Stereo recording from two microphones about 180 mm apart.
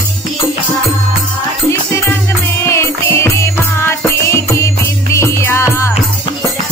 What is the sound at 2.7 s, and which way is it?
Music, 15° left (ahead or behind).